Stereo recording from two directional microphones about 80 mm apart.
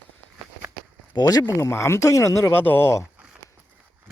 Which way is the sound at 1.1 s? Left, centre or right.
Left.